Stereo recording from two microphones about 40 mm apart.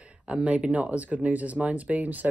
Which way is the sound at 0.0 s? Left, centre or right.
Right.